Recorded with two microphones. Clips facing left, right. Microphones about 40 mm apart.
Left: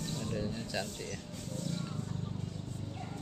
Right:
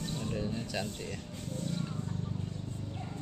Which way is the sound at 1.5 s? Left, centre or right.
Right.